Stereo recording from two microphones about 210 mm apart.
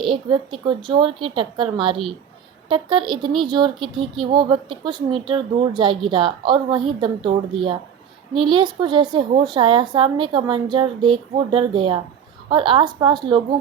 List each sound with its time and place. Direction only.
0.3 s a woman's voice: 20° right (ahead or behind)